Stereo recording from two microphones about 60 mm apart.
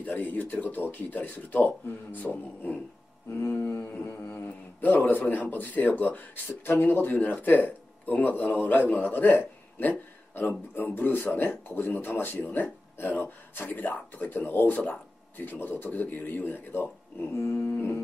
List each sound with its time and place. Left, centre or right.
0.0 s speech: left
3.3 s speech: left
4.8 s speech: left